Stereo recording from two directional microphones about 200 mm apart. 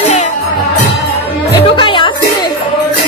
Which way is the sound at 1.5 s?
25° left (ahead or behind).